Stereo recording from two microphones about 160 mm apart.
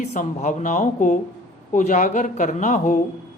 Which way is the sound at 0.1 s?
50° left (ahead or behind).